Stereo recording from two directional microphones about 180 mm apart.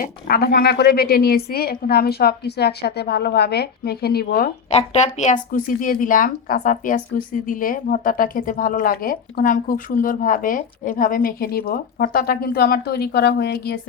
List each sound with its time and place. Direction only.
0.0 s a woman's voice: 55° left (ahead or behind)
4.7 s a woman's voice: 35° left (ahead or behind); by 13.7 s 60° left (ahead or behind)